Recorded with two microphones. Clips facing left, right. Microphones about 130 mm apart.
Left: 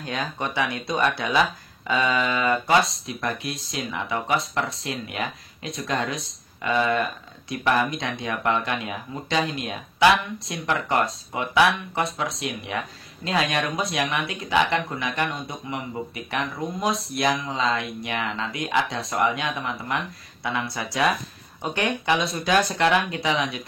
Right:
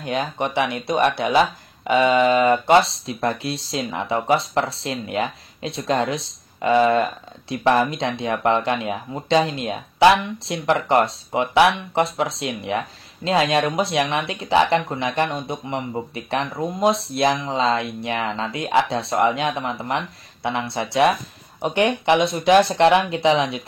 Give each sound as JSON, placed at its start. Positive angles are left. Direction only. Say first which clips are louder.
{"t": 0.0, "sound": "speech", "louder": "right 5 dB", "side_deg": -25}